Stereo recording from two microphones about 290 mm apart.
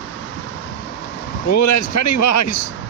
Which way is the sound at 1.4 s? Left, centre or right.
Left.